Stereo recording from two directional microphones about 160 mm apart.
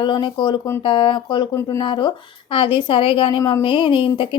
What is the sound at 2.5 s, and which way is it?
A woman's voice, 30° left (ahead or behind).